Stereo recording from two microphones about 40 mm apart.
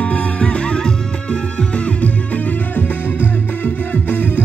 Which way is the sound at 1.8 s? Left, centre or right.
Left.